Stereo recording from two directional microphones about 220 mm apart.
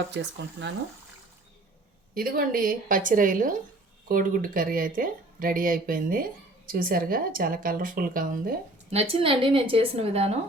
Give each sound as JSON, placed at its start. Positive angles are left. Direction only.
{"t": 0.1, "sound": "speech", "side_deg": -50}
{"t": 2.1, "sound": "speech", "side_deg": -40}